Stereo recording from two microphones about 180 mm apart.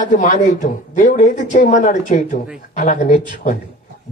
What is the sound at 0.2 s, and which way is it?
A woman's voice, 45° left (ahead or behind).